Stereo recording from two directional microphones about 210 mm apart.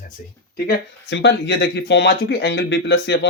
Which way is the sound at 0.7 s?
55° left (ahead or behind).